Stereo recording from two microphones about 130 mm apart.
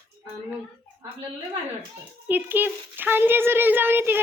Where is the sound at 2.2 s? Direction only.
15° right (ahead or behind).